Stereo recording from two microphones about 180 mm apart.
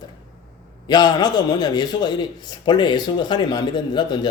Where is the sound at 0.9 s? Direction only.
25° left (ahead or behind).